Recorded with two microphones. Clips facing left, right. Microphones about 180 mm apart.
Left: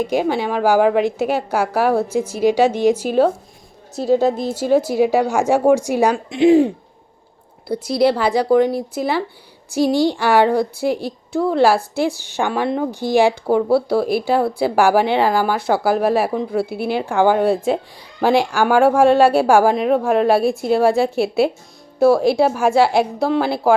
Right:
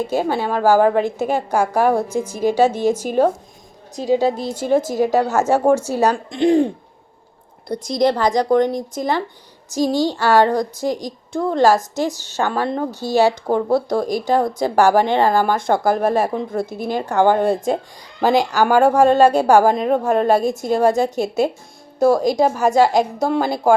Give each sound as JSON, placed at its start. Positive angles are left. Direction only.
{"t": 0.0, "sound": "speech", "side_deg": 15}
{"t": 3.1, "sound": "a woman's voice", "side_deg": -15}
{"t": 4.4, "sound": "speech", "side_deg": 10}
{"t": 7.7, "sound": "a woman's voice", "side_deg": 5}
{"t": 20.4, "sound": "a woman's voice", "side_deg": -40}
{"t": 21.9, "sound": "speech", "side_deg": 5}